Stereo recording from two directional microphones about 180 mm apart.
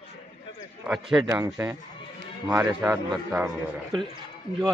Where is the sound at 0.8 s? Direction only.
5° right (ahead or behind).